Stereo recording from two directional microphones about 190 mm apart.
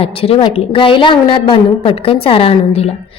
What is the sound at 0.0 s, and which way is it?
A woman's voice, 30° left (ahead or behind).